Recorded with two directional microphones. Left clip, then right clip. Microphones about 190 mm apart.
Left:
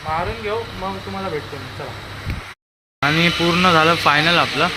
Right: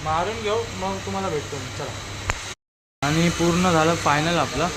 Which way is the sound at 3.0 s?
5° right (ahead or behind).